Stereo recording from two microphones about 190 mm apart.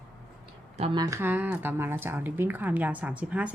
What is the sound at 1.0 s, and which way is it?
Speech, 15° right (ahead or behind).